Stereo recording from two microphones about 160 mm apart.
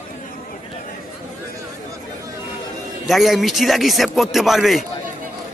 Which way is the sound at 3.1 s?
Centre (ahead or behind).